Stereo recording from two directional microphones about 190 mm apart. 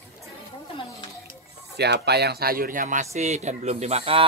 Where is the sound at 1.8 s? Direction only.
60° right (ahead or behind).